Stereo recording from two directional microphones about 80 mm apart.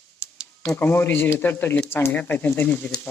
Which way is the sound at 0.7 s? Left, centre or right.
Left.